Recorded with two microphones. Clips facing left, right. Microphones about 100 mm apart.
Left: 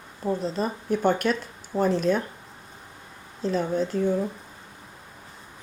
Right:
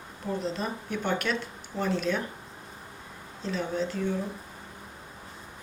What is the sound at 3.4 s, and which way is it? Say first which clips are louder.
Speech: left 5 dB; 40° left (ahead or behind).